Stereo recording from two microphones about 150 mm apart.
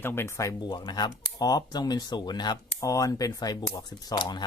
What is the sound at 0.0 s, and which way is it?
Speech, 15° left (ahead or behind).